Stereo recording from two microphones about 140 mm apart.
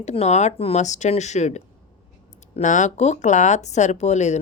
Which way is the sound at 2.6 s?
60° left (ahead or behind).